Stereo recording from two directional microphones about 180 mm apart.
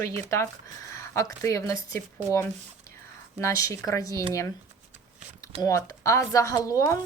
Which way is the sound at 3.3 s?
15° left (ahead or behind).